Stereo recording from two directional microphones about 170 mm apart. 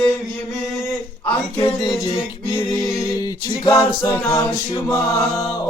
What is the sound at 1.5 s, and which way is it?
Music, 20° left (ahead or behind).